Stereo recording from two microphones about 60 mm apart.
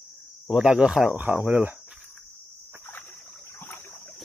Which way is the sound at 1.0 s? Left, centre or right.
Right.